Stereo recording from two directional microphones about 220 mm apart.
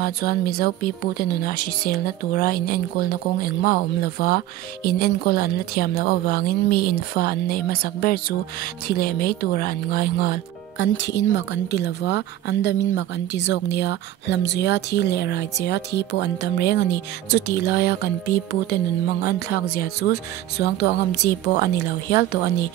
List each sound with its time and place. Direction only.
0.0 s speech: 45° left (ahead or behind)